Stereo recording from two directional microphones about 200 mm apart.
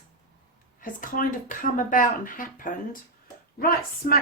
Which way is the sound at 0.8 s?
40° left (ahead or behind).